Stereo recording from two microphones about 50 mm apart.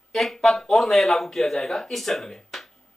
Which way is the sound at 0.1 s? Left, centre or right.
Centre.